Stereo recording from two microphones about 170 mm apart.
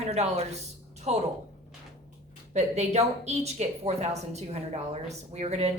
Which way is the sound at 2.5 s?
40° right (ahead or behind).